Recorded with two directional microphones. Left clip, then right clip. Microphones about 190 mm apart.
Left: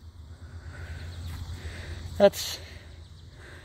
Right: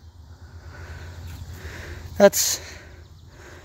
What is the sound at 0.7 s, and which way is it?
Vehicle, 20° right (ahead or behind).